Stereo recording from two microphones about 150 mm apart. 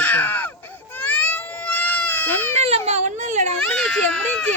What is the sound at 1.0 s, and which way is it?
Baby cry, 10° left (ahead or behind).